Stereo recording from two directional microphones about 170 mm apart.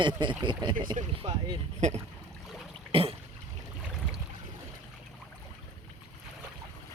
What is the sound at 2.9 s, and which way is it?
Throat clearing, 35° right (ahead or behind).